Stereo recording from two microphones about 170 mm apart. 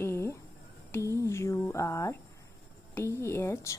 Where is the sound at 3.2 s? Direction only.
15° left (ahead or behind).